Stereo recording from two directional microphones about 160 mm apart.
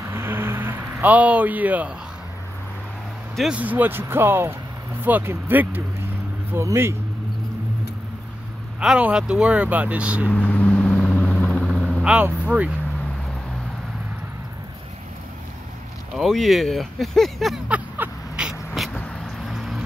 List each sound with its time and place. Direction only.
0.0 s vehicle: 15° right (ahead or behind)
3.3 s speech: 5° right (ahead or behind)
8.7 s speech: 5° right (ahead or behind)
10.3 s vehicle: 10° left (ahead or behind); by 12.7 s 10° right (ahead or behind)
16.2 s speech: centre (ahead or behind)
18.8 s vehicle: centre (ahead or behind)